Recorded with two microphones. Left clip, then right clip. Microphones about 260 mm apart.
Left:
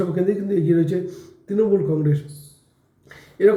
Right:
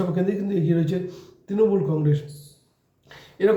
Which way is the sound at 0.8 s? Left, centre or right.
Right.